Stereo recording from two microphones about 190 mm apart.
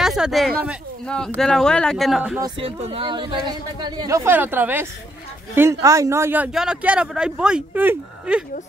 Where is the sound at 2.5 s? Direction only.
30° right (ahead or behind); by 8.5 s 10° right (ahead or behind).